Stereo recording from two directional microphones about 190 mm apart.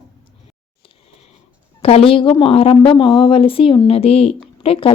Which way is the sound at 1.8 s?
30° left (ahead or behind).